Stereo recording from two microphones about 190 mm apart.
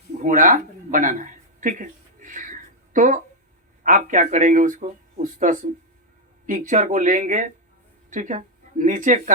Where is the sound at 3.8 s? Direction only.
45° right (ahead or behind).